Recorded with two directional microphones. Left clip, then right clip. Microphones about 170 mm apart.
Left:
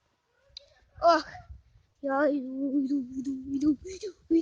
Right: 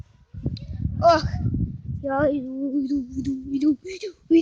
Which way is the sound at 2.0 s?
10° left (ahead or behind).